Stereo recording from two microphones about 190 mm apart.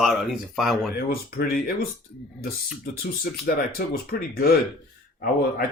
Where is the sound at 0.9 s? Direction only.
50° left (ahead or behind).